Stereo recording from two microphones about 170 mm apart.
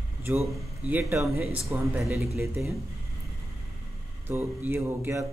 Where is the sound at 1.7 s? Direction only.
15° right (ahead or behind).